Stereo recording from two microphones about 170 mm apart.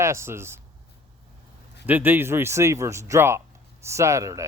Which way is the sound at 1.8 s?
10° right (ahead or behind).